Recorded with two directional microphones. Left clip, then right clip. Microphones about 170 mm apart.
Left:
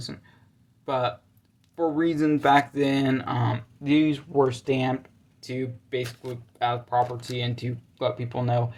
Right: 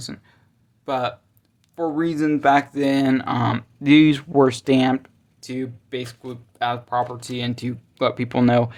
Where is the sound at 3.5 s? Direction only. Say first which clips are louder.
Right 11 dB; 55° right (ahead or behind).